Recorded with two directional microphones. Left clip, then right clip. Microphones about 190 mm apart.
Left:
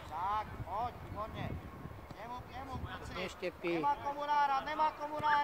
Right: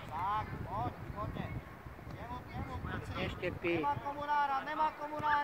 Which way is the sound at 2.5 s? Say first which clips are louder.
Right 1 dB; 55° right (ahead or behind).